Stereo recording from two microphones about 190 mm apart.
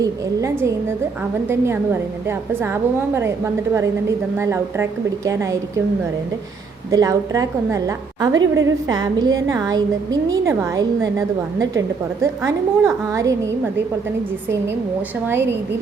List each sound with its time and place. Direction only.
0.0 s a woman's voice: 15° right (ahead or behind)
6.9 s a woman's voice: 20° right (ahead or behind)
12.2 s a woman's voice: 15° right (ahead or behind)